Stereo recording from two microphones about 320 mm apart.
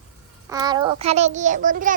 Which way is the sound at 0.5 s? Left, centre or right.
Centre.